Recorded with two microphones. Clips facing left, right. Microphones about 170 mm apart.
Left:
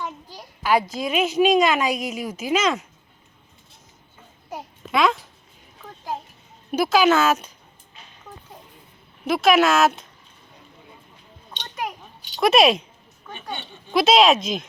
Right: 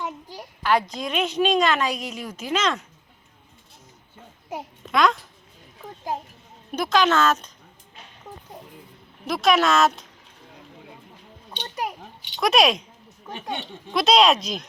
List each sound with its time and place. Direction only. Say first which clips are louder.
0.0 s a sound: right 1 dB; 10° right (ahead or behind)
0.6 s a woman's voice: left 2 dB; 10° left (ahead or behind)
4.9 s a child's voice: even; 5° left (ahead or behind)
6.7 s a woman's voice: left 3 dB; 5° left (ahead or behind)
9.2 s speech: left 3 dB; 5° left (ahead or behind)
11.5 s a child's voice: right 1 dB; 10° right (ahead or behind)
12.4 s speech: left 3 dB; centre (ahead or behind)
13.3 s speech: right 3 dB; 85° right
13.9 s speech: left 2 dB; centre (ahead or behind)